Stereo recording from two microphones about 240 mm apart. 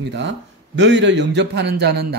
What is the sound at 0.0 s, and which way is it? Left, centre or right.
A man's voice, right.